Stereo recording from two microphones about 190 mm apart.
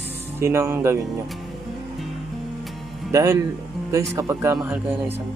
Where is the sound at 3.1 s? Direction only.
15° right (ahead or behind).